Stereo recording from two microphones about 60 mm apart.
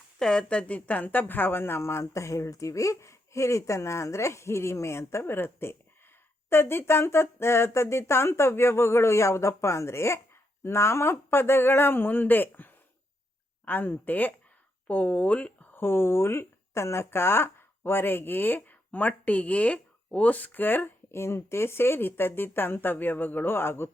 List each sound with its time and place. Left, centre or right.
0.2 s speech: centre
15.7 s speech: left